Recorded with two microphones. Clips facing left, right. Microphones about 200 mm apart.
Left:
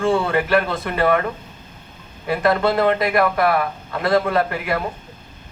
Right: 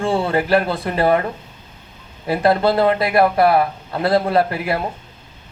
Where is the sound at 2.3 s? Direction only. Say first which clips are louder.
Right 2 dB; 30° right (ahead or behind).